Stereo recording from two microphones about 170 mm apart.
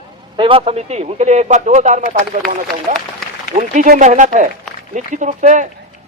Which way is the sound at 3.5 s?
45° right (ahead or behind).